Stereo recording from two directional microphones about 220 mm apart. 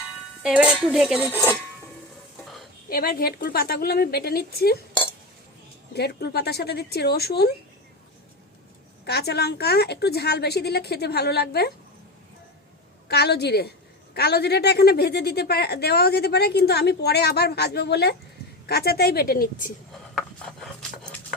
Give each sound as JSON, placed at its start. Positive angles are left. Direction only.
{"t": 0.4, "sound": "cutlery", "side_deg": -5}
{"t": 2.9, "sound": "a woman's voice", "side_deg": 45}
{"t": 5.9, "sound": "a woman's voice", "side_deg": 45}
{"t": 9.0, "sound": "a woman's voice", "side_deg": 50}
{"t": 13.1, "sound": "a woman's voice", "side_deg": 45}
{"t": 19.9, "sound": "wood", "side_deg": 0}